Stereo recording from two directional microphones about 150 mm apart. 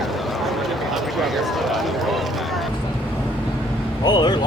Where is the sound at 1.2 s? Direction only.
Centre (ahead or behind).